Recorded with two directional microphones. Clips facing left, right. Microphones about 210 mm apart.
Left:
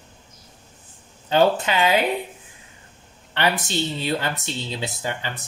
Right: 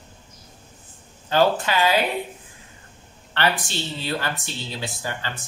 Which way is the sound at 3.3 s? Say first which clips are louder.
Left 1 dB; 20° left (ahead or behind).